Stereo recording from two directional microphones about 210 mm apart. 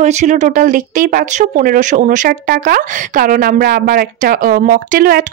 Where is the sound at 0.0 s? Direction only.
35° right (ahead or behind).